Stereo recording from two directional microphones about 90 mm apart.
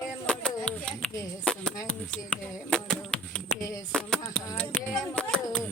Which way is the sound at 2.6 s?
10° left (ahead or behind).